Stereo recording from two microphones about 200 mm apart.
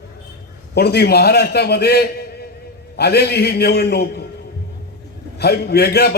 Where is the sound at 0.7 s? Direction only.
55° left (ahead or behind).